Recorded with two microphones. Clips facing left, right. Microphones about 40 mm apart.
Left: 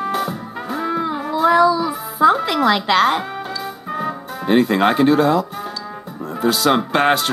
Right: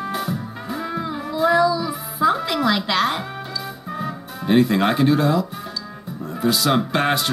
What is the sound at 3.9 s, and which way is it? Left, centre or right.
Music, centre.